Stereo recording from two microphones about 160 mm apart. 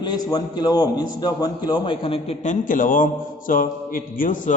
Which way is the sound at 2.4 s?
55° left (ahead or behind).